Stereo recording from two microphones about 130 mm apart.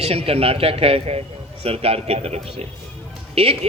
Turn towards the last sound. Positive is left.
turn(degrees=-50)  # may be behind; listen again after turning